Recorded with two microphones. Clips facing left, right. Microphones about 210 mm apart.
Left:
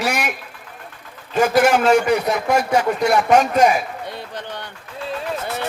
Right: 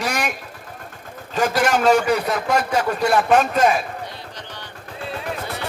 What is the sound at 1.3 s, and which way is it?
Speech, 10° left (ahead or behind).